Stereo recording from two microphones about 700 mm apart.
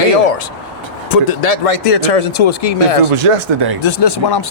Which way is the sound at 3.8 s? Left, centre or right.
Left.